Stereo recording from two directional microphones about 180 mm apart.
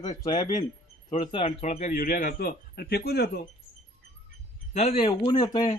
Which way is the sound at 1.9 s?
50° left (ahead or behind).